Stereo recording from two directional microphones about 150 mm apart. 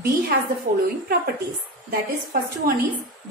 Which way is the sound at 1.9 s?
85° right.